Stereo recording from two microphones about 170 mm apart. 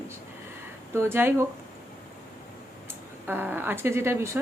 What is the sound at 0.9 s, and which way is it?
Speech, 15° right (ahead or behind).